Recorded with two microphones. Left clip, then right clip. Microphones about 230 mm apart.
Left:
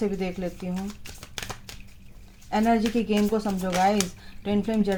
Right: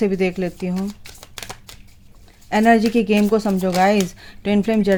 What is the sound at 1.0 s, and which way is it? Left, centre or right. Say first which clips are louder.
Crumpling: right 2 dB; centre.